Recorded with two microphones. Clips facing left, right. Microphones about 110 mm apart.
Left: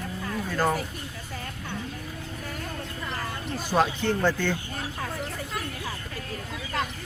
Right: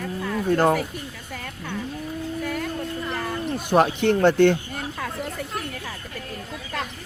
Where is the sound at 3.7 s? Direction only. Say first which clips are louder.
Right 5 dB; 60° right (ahead or behind).